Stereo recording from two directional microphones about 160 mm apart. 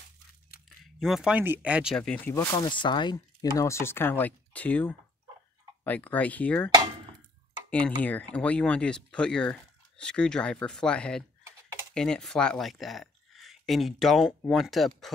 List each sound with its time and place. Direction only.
0.9 s speech: centre (ahead or behind)
2.0 s speech: 10° left (ahead or behind)
2.5 s speech: 30° left (ahead or behind); by 6.7 s 10° left (ahead or behind)
8.0 s speech: 10° left (ahead or behind)